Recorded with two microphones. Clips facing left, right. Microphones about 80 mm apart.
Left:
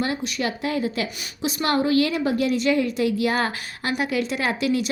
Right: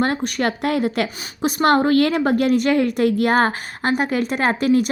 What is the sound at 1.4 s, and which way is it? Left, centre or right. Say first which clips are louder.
A woman's voice: right 6 dB; right.